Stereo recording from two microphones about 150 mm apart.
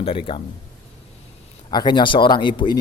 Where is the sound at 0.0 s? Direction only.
35° left (ahead or behind).